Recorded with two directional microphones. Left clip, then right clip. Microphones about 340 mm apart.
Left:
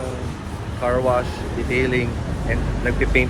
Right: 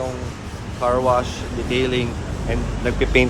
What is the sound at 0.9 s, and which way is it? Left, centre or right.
Speech, centre.